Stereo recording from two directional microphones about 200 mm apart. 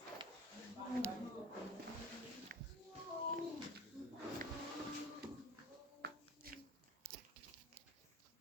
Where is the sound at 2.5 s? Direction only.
45° right (ahead or behind).